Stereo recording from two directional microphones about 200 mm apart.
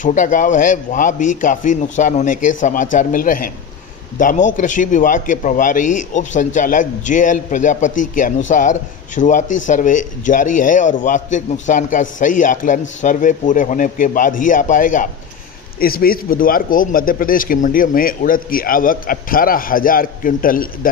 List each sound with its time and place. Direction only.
0.0 s a man's voice: 40° left (ahead or behind)